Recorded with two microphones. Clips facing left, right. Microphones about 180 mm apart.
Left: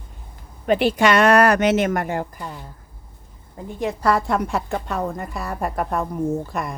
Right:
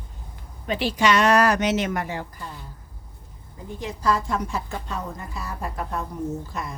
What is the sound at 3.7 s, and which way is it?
A woman's voice, 60° left (ahead or behind).